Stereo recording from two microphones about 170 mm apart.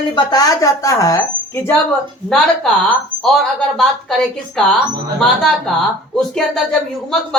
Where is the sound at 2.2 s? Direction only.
Centre (ahead or behind).